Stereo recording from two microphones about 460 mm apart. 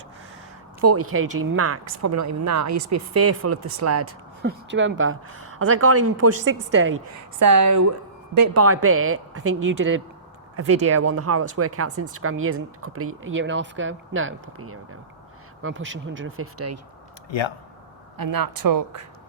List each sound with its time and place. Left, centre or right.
0.8 s speech: right
4.4 s speech: right
6.9 s speech: right
18.2 s speech: right